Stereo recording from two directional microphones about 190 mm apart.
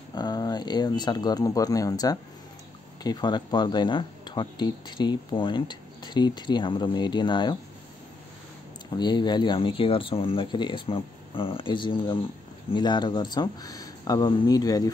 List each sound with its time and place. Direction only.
0.1 s speech: 20° left (ahead or behind)
8.9 s speech: 25° left (ahead or behind)